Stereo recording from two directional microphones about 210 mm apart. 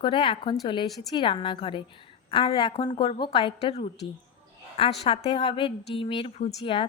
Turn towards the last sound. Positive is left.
turn(degrees=25)  # may be behind; listen again after turning